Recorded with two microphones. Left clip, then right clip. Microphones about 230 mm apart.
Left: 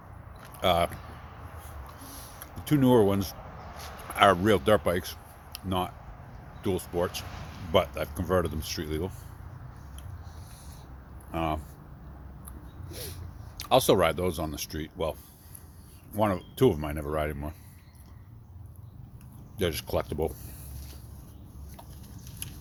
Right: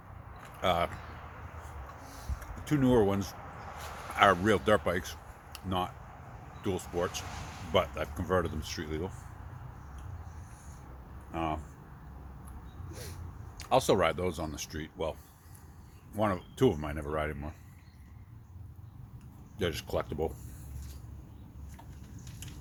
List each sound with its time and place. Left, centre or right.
0.6 s speech: left
2.0 s a sound: left
4.1 s speech: left
11.3 s speech: left
12.9 s a sound: left
13.6 s speech: left
16.1 s speech: left
19.5 s speech: left